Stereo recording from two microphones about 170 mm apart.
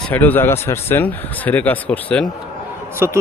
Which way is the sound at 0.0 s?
10° left (ahead or behind).